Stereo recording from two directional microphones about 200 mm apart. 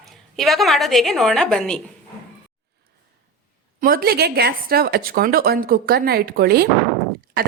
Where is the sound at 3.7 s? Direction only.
45° right (ahead or behind).